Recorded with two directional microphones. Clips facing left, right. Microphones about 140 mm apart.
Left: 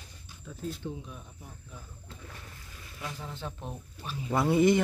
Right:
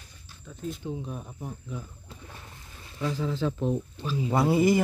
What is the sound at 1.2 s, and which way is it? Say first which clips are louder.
Speech: right 11 dB; 90° right.